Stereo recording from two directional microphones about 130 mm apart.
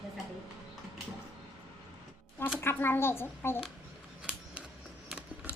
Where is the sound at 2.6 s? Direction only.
15° left (ahead or behind).